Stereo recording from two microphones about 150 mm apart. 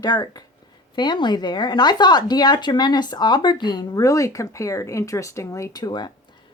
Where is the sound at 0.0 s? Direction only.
25° left (ahead or behind).